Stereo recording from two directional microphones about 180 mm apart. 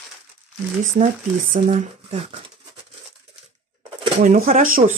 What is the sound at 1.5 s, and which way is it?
Speech, 40° right (ahead or behind).